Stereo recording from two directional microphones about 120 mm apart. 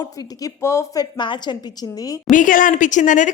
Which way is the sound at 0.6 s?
25° left (ahead or behind).